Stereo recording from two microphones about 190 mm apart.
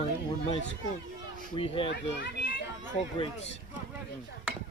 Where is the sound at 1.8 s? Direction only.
65° left (ahead or behind).